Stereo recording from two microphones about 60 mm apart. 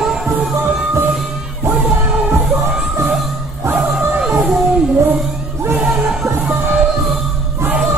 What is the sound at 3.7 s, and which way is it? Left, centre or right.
Music, centre.